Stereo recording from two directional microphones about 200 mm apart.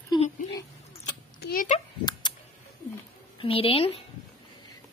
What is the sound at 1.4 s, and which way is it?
Speech, 45° left (ahead or behind).